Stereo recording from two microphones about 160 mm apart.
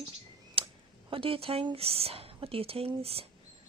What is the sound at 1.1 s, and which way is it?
Speech, 35° right (ahead or behind).